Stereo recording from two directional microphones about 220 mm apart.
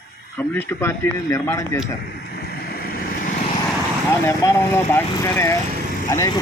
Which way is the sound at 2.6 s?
45° left (ahead or behind).